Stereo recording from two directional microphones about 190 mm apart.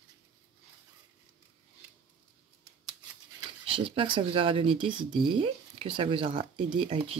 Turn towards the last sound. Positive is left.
turn(degrees=-30)  # may be behind; listen again after turning